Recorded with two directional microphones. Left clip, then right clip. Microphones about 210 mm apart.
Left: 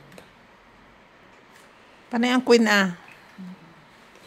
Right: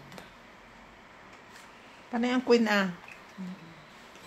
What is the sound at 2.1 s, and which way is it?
Speech, 50° left (ahead or behind).